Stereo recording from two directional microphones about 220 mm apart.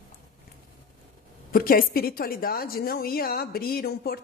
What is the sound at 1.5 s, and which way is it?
A woman's voice, 40° left (ahead or behind).